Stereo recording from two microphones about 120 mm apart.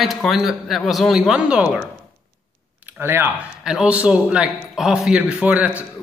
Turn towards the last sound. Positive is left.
turn(degrees=-10)  # may be behind; listen again after turning